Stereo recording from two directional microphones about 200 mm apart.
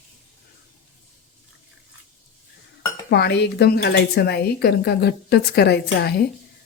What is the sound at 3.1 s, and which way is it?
A woman's voice, 55° left (ahead or behind).